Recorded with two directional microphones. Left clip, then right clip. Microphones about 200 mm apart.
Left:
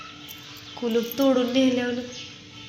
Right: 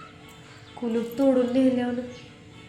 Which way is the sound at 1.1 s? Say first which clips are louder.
Right 1 dB; 15° left (ahead or behind).